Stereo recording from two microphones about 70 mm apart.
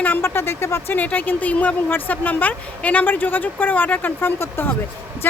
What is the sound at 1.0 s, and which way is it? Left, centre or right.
Speech, left.